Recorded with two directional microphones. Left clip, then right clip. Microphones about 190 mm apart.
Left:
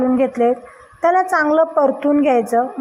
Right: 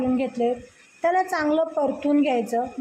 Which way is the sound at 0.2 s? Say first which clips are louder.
Left 8 dB; 15° left (ahead or behind).